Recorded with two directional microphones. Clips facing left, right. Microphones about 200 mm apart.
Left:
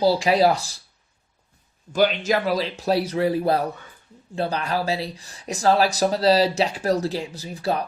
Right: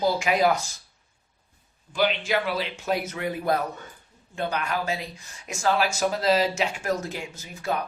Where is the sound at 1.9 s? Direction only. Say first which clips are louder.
Left 4 dB; 45° left (ahead or behind).